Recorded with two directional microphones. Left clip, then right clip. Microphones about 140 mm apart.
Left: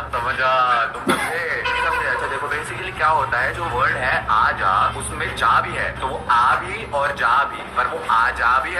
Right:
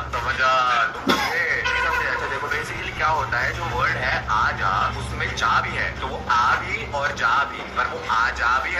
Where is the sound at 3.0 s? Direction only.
25° left (ahead or behind).